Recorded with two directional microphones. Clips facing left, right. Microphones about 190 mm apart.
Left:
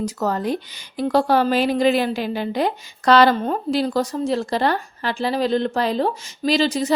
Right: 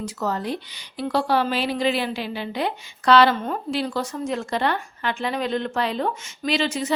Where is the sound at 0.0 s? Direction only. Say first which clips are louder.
Left 4 dB; 45° left (ahead or behind).